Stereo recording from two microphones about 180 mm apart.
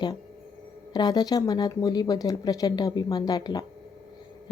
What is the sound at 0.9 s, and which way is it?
A woman's voice, 20° left (ahead or behind).